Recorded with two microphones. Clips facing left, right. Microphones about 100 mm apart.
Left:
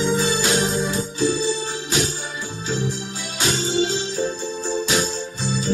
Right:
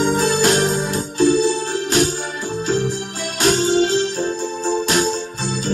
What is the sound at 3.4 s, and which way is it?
Music, 60° right (ahead or behind).